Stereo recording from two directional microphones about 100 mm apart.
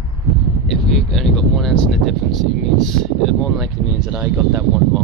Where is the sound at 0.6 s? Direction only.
5° left (ahead or behind).